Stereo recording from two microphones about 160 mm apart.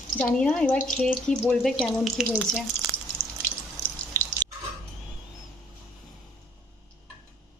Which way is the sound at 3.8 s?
20° right (ahead or behind).